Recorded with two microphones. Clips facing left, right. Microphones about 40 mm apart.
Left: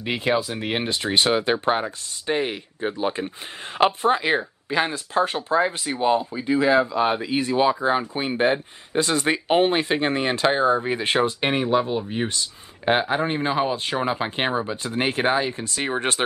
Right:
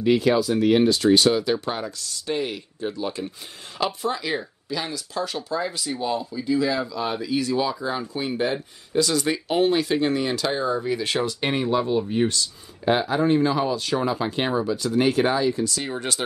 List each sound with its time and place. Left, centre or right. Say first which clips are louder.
0.0 s speech: right 4 dB; left